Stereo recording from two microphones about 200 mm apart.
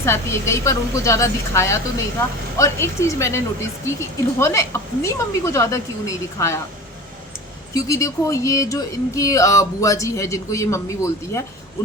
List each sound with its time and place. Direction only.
0.0 s speech: 15° left (ahead or behind)
7.7 s speech: 15° left (ahead or behind)